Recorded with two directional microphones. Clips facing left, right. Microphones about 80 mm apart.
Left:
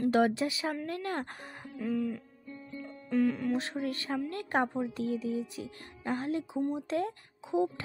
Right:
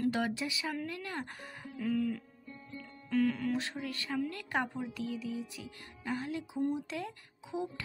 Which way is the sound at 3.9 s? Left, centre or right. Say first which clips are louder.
Left 2 dB; left.